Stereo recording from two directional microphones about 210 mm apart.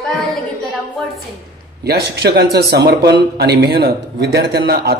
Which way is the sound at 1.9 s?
50° right (ahead or behind).